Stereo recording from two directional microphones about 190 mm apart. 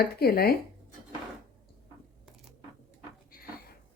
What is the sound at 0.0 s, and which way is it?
Speech, 55° left (ahead or behind).